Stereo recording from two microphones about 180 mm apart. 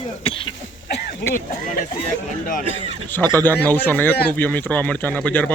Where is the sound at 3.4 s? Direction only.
10° left (ahead or behind).